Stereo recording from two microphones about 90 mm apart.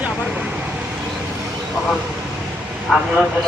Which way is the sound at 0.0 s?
15° right (ahead or behind).